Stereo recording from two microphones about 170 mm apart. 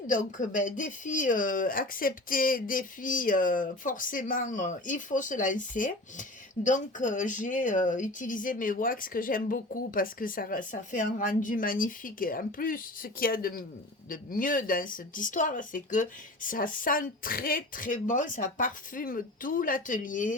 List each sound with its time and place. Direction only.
0.1 s speech: 50° left (ahead or behind)